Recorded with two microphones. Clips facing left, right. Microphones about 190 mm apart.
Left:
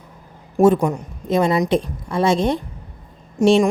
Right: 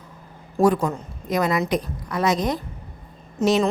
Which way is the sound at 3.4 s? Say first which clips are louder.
Left 5 dB; 15° left (ahead or behind).